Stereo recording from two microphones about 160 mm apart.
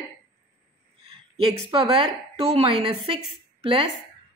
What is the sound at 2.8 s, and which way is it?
Speech, centre (ahead or behind).